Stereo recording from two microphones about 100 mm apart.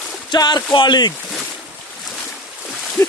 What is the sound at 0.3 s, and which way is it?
Speech, 45° left (ahead or behind).